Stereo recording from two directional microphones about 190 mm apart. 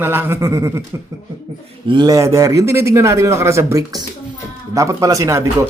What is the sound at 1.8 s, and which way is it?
Speech, 25° right (ahead or behind).